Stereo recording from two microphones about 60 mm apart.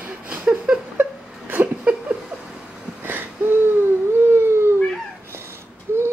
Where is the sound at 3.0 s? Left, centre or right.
Right.